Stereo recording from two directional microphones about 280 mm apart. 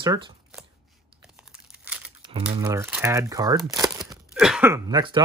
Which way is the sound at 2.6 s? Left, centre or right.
Centre.